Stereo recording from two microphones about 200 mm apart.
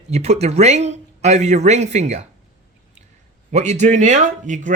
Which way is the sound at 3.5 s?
35° right (ahead or behind).